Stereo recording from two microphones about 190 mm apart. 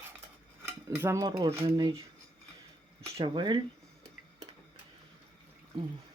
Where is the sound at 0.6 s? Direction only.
10° right (ahead or behind).